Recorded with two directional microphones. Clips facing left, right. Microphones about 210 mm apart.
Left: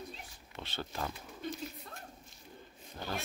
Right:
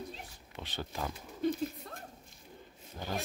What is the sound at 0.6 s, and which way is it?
Speech, 15° right (ahead or behind).